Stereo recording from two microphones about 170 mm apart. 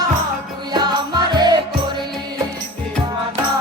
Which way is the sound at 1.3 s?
25° right (ahead or behind).